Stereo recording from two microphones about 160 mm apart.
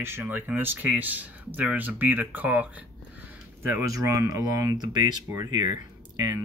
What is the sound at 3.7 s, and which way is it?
Speech, 20° right (ahead or behind).